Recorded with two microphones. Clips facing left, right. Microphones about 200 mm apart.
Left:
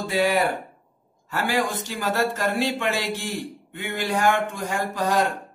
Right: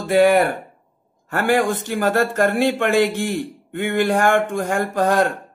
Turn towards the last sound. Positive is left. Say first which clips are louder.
# right 5 dB
turn(degrees=-55)  # may be behind; listen again after turning